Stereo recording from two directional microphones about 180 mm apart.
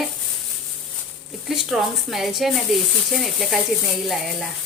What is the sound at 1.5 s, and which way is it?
Speech, centre (ahead or behind).